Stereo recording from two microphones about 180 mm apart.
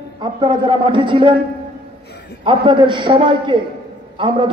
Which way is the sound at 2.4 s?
25° right (ahead or behind).